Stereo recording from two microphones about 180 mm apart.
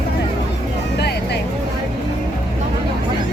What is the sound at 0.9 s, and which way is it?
Music, 65° left (ahead or behind).